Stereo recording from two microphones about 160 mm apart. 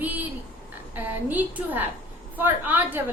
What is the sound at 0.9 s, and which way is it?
A woman's voice, 10° right (ahead or behind).